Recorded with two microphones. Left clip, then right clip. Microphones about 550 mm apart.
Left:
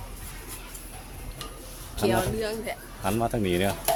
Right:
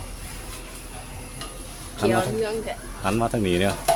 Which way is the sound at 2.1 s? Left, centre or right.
Left.